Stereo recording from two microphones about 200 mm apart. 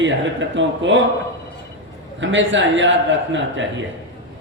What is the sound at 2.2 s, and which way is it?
Speech, 70° right (ahead or behind).